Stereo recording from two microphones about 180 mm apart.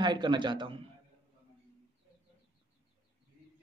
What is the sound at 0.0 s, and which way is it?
Speech, 25° right (ahead or behind).